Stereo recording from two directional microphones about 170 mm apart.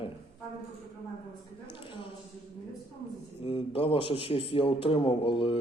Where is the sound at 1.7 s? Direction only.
30° left (ahead or behind).